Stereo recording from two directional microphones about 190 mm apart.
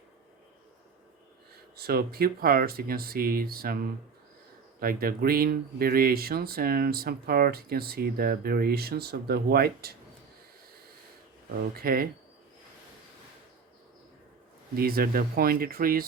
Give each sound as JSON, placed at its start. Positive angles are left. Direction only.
{"t": 1.7, "sound": "speech", "side_deg": -55}
{"t": 11.7, "sound": "speech", "side_deg": -50}
{"t": 14.8, "sound": "speech", "side_deg": -55}